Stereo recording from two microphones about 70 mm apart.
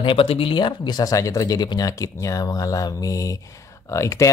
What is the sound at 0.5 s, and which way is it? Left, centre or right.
Speech, left.